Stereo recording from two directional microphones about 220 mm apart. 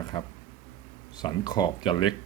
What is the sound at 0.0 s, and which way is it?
Speech, 20° left (ahead or behind).